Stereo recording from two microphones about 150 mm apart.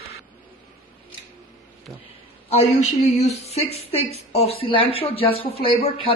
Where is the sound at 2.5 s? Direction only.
45° left (ahead or behind).